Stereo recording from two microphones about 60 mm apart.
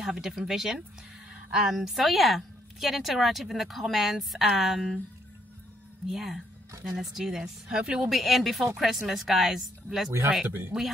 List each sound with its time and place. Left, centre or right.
0.0 s a woman's voice: centre
1.3 s a sound: centre
1.7 s a woman's voice: centre
6.0 s a woman's voice: centre
8.1 s a woman's voice: centre
10.4 s speech: right